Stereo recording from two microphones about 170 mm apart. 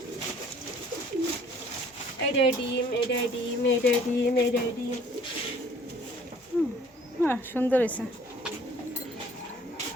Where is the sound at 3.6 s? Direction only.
75° left (ahead or behind).